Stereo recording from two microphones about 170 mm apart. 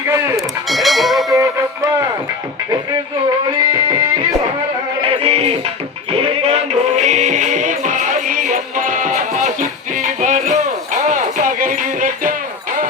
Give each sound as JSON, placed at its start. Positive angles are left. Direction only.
{"t": 0.3, "sound": "a sound", "side_deg": 0}
{"t": 1.4, "sound": "music", "side_deg": -20}
{"t": 5.0, "sound": "music", "side_deg": -35}